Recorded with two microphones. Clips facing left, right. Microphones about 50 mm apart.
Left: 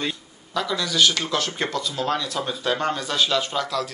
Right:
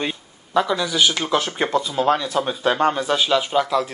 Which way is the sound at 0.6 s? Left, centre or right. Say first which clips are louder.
Right 3 dB; right.